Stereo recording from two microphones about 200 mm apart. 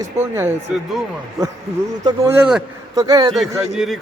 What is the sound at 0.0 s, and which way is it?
Speech, 15° right (ahead or behind).